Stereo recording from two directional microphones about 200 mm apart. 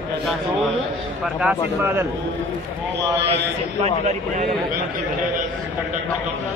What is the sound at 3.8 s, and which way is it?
Speech, 35° right (ahead or behind).